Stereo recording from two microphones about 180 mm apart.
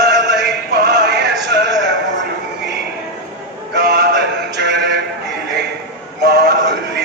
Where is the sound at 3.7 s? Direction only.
65° right (ahead or behind).